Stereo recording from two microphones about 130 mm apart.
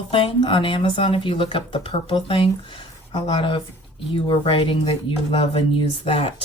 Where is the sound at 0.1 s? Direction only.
45° left (ahead or behind).